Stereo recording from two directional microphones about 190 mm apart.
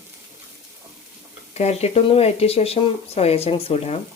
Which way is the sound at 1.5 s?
35° left (ahead or behind).